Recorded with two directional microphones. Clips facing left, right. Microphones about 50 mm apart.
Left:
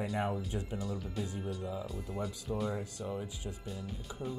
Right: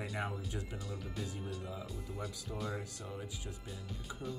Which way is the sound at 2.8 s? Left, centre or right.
Left.